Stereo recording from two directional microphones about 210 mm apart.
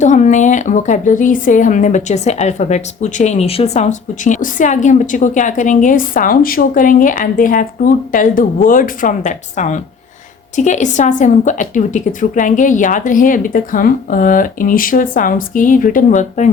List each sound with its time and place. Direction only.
0.0 s a woman's voice: 35° left (ahead or behind)